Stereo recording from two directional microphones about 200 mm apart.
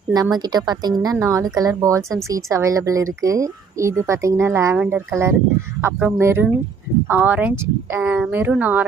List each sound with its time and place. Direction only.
0.1 s speech: 20° right (ahead or behind)